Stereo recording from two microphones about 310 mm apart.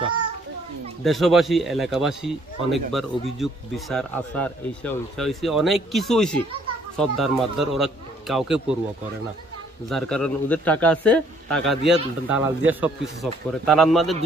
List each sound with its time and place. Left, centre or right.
1.0 s a man's voice: centre
9.8 s a man's voice: centre